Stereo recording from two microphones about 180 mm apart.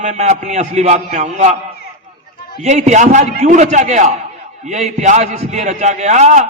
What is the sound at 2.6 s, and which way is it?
A man's voice, 40° right (ahead or behind).